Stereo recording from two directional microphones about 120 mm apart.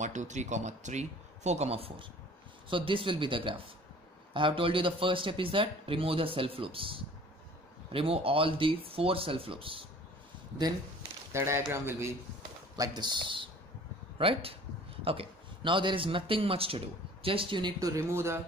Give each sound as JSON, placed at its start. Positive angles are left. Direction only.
{"t": 0.0, "sound": "speech", "side_deg": -85}
{"t": 11.3, "sound": "speech", "side_deg": -20}
{"t": 12.7, "sound": "speech", "side_deg": -35}